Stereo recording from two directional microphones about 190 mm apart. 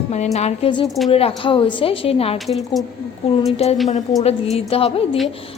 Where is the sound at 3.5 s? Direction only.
35° left (ahead or behind).